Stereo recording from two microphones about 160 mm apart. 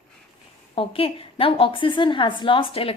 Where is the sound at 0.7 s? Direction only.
35° left (ahead or behind).